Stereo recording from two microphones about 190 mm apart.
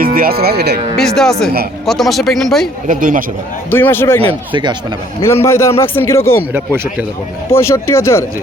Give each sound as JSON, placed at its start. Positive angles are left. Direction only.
{"t": 0.0, "sound": "speech", "side_deg": -50}
{"t": 0.9, "sound": "speech", "side_deg": 0}
{"t": 2.8, "sound": "speech", "side_deg": -45}
{"t": 3.7, "sound": "a man's voice", "side_deg": 10}
{"t": 5.2, "sound": "a man's voice", "side_deg": 15}
{"t": 7.5, "sound": "a man's voice", "side_deg": 15}